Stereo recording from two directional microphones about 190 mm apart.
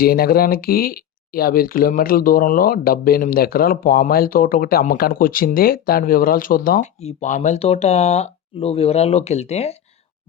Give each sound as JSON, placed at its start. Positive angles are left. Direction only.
{"t": 0.0, "sound": "speech", "side_deg": 55}
{"t": 7.0, "sound": "speech", "side_deg": 35}